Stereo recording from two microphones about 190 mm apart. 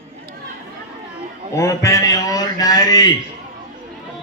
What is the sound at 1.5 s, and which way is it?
A man's voice, 15° left (ahead or behind).